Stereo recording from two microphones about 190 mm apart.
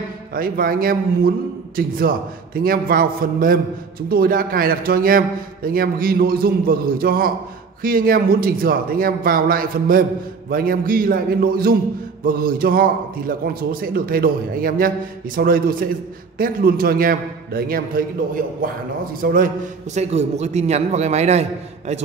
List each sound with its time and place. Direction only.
0.3 s a man's voice: 50° right (ahead or behind)